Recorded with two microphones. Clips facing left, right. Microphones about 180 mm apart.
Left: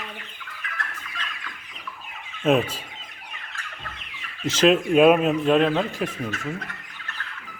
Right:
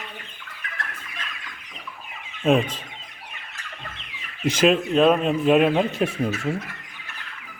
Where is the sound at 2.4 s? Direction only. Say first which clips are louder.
Right 1 dB; 5° left (ahead or behind).